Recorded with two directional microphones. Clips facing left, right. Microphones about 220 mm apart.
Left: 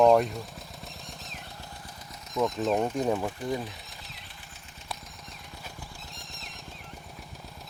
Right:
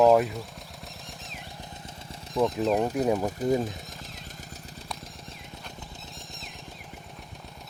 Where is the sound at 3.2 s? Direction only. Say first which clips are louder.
Right 6 dB; 40° right (ahead or behind).